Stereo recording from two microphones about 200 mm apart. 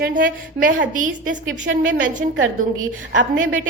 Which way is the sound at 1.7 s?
70° right (ahead or behind).